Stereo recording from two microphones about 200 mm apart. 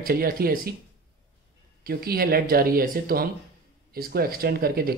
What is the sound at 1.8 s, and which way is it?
A man's voice, 50° right (ahead or behind).